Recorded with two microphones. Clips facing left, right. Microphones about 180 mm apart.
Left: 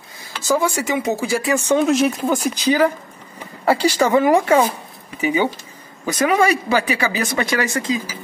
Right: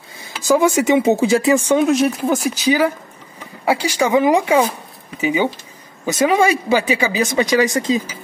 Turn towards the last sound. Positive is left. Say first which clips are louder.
# right 5 dB
turn(degrees=-15)  # may be behind; listen again after turning